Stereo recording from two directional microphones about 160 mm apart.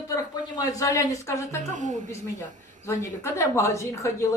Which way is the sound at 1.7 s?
50° right (ahead or behind).